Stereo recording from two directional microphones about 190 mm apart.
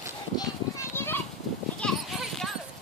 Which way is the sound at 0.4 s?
15° left (ahead or behind).